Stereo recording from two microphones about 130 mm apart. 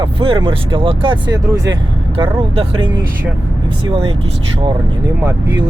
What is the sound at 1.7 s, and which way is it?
Speech, 45° right (ahead or behind).